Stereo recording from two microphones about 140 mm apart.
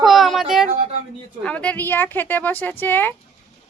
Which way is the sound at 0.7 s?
40° right (ahead or behind).